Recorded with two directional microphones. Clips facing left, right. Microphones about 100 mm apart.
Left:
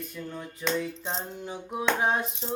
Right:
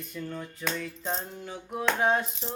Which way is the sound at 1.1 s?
20° left (ahead or behind).